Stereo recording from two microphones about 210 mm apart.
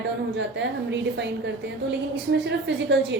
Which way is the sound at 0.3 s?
55° right (ahead or behind).